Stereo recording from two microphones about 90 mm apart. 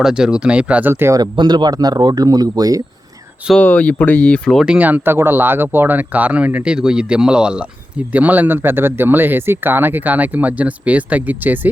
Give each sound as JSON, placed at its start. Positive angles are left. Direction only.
{"t": 0.0, "sound": "speech", "side_deg": -10}
{"t": 1.1, "sound": "speech", "side_deg": -50}
{"t": 3.6, "sound": "speech", "side_deg": 15}
{"t": 4.6, "sound": "speech", "side_deg": -15}